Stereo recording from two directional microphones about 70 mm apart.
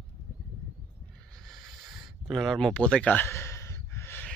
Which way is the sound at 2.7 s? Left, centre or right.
Centre.